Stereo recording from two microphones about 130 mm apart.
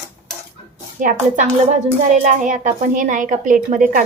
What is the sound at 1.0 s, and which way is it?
Speech, 90° right.